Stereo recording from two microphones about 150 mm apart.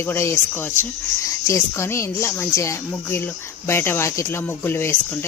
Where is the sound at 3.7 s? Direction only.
15° left (ahead or behind).